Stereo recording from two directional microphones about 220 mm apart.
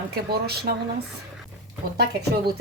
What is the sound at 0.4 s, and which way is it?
A woman's voice, 45° right (ahead or behind).